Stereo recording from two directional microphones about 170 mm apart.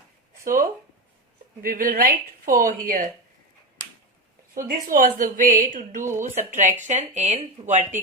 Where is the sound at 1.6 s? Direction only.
60° right (ahead or behind).